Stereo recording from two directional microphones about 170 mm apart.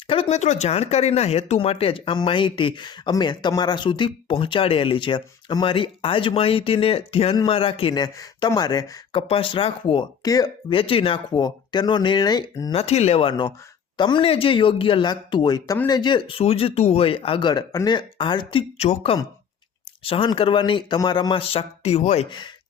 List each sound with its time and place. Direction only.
0.1 s speech: 35° left (ahead or behind)
9.2 s speech: 35° left (ahead or behind)
12.7 s speech: 35° left (ahead or behind)